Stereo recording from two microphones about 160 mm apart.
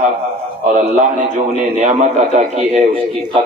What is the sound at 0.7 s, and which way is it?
A man's voice, 50° right (ahead or behind).